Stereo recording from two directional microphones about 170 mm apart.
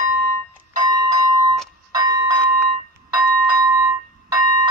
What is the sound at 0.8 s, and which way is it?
Bell, 20° right (ahead or behind).